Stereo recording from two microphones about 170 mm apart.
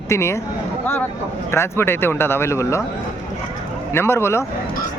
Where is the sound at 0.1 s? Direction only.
15° left (ahead or behind).